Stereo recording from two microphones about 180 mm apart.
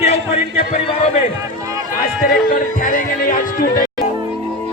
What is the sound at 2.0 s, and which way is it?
Speech, 55° left (ahead or behind).